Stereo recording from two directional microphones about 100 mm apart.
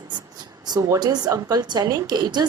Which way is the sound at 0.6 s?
40° right (ahead or behind).